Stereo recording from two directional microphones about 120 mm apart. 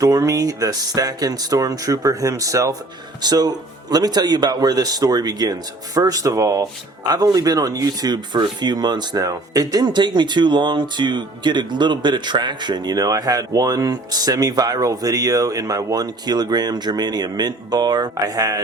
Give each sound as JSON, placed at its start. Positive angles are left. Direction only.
{"t": 0.0, "sound": "speech", "side_deg": -25}